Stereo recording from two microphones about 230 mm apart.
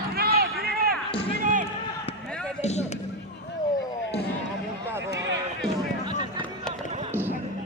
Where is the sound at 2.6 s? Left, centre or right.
Left.